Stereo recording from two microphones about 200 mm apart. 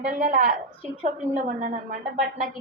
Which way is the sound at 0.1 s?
40° right (ahead or behind).